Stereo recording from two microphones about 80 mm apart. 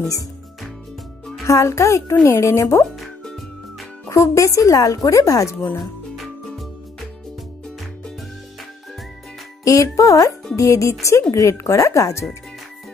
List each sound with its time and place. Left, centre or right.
1.4 s a child's voice: left
4.1 s a woman's voice: left
9.7 s a woman's voice: left